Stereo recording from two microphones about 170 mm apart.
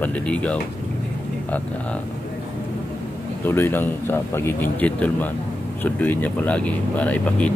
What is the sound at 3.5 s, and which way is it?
Speech, 10° left (ahead or behind).